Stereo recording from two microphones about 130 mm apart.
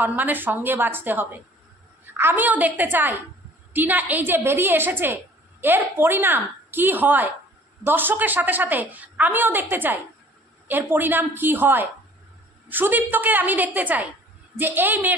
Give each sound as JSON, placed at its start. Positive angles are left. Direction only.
{"t": 0.0, "sound": "a woman's voice", "side_deg": -15}